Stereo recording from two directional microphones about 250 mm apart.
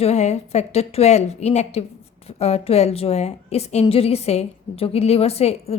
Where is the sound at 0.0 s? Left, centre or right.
Left.